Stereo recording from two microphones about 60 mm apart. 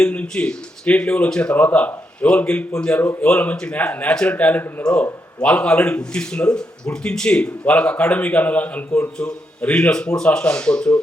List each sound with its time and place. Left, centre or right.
0.0 s speech: left
4.1 s a man's voice: centre
4.4 s a man's voice: left